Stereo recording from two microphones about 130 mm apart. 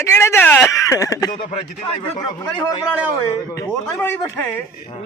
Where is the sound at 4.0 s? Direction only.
15° left (ahead or behind).